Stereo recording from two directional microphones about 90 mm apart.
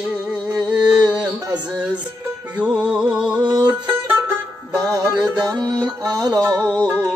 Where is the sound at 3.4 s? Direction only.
55° right (ahead or behind).